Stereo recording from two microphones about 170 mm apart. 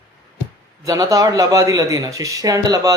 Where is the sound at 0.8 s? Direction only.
20° right (ahead or behind).